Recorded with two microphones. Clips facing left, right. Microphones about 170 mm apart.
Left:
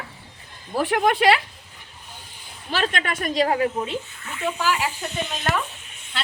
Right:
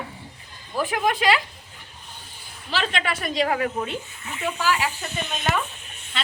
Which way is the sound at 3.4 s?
25° left (ahead or behind).